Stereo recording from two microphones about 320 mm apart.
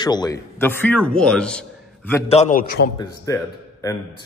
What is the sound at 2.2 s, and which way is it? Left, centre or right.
Speech, left.